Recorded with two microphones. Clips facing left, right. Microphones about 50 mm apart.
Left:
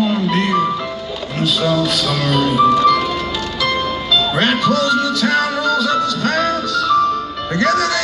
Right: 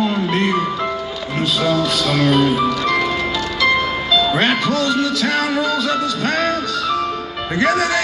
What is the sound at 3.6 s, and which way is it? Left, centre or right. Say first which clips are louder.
Music: right 3 dB; centre.